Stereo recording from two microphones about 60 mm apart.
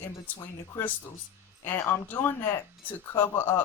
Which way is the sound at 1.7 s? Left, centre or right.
Left.